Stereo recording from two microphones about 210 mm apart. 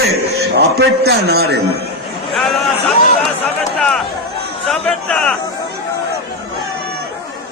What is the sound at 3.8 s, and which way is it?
A man's voice, centre (ahead or behind).